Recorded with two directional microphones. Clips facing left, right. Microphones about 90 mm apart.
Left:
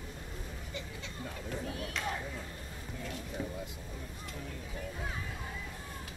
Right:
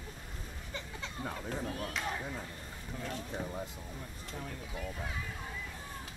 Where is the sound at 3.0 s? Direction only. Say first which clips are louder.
Right 1 dB; 40° right (ahead or behind).